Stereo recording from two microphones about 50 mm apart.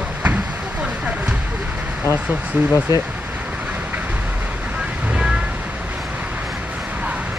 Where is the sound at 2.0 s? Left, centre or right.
Right.